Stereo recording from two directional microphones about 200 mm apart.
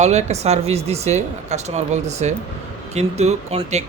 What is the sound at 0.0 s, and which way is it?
Speech, 35° right (ahead or behind).